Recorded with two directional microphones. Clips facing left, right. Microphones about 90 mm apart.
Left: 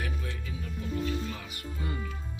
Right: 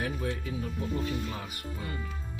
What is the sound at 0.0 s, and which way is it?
Music, 35° right (ahead or behind).